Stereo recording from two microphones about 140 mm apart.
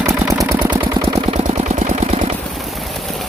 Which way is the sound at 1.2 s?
50° right (ahead or behind).